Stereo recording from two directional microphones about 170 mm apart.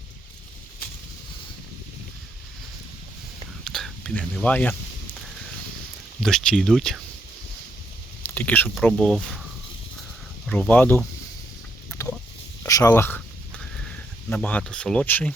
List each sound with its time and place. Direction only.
3.6 s speech: centre (ahead or behind)
6.1 s speech: 5° left (ahead or behind)
8.2 s speech: 10° left (ahead or behind)
10.4 s speech: 5° left (ahead or behind)
12.0 s a sound: 20° left (ahead or behind)